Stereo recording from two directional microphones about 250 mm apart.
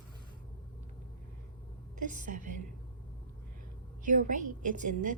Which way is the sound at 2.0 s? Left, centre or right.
Right.